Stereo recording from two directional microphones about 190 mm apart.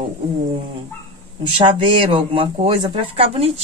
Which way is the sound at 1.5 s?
25° right (ahead or behind).